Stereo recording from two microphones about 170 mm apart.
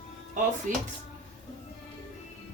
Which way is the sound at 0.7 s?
45° right (ahead or behind).